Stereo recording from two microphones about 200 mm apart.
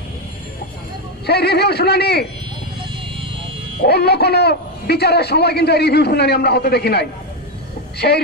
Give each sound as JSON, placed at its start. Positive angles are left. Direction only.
{"t": 1.2, "sound": "a man's voice", "side_deg": 55}
{"t": 3.8, "sound": "a man's voice", "side_deg": 55}